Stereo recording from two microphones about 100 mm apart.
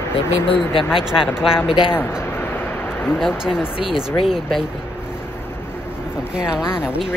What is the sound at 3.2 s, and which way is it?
Speech, 5° right (ahead or behind).